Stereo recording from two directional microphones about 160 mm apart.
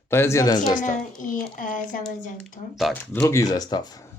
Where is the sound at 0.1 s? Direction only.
15° left (ahead or behind).